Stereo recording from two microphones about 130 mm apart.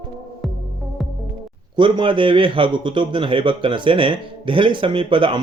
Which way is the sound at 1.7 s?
40° right (ahead or behind).